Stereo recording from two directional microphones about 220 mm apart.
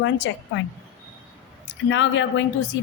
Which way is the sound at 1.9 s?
55° left (ahead or behind).